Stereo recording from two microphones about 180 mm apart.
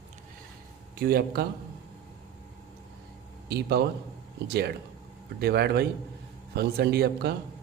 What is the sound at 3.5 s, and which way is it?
Speech, 60° right (ahead or behind).